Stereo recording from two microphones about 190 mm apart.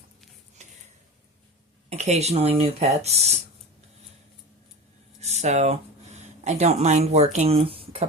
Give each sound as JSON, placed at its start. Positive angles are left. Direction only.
{"t": 1.9, "sound": "speech", "side_deg": -35}
{"t": 5.2, "sound": "a sound", "side_deg": -35}
{"t": 6.4, "sound": "speech", "side_deg": -35}